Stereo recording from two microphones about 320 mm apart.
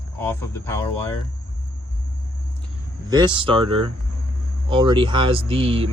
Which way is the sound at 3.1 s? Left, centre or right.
Centre.